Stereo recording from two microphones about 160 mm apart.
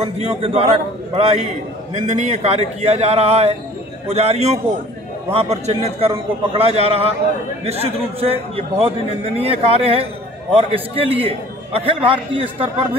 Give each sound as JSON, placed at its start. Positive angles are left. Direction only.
{"t": 0.0, "sound": "a man's voice", "side_deg": -40}